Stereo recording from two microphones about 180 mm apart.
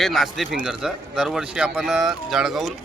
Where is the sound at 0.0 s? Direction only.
Centre (ahead or behind).